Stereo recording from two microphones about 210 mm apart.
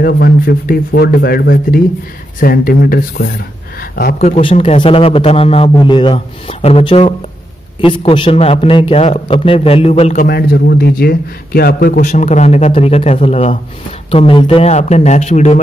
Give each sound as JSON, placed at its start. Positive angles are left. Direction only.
{"t": 0.0, "sound": "speech", "side_deg": 45}
{"t": 4.2, "sound": "a man's voice", "side_deg": 30}
{"t": 10.2, "sound": "a man's voice", "side_deg": 45}